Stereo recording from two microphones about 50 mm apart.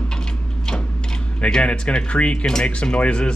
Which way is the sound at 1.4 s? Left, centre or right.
Centre.